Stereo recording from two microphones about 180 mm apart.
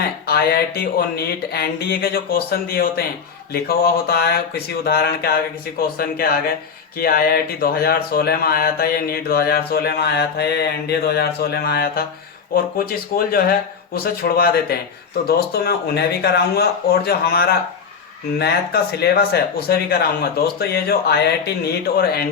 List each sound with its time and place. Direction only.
0.3 s speech: 60° left (ahead or behind)